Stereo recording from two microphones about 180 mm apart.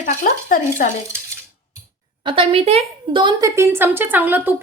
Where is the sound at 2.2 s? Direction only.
30° right (ahead or behind).